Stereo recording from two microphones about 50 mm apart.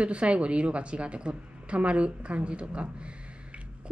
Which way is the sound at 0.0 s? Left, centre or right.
Right.